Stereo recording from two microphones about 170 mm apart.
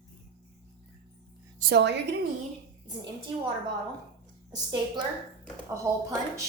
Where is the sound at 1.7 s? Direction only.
90° right.